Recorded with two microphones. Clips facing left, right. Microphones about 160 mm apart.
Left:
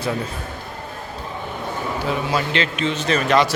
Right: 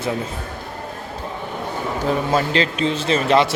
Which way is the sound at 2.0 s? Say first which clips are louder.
Right 4 dB; 40° right (ahead or behind).